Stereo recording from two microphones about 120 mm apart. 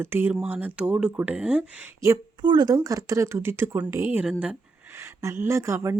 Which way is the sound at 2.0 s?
30° right (ahead or behind).